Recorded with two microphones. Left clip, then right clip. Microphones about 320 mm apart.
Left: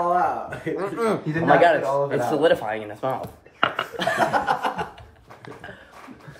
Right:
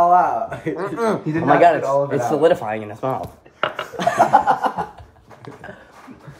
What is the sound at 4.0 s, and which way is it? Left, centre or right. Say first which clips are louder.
Chuckle: right 6 dB; right.